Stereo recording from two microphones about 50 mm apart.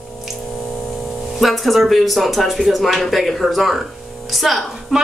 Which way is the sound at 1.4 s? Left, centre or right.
Centre.